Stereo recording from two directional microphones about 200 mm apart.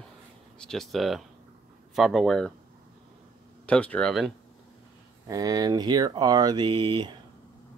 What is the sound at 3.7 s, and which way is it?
Speech, 5° left (ahead or behind).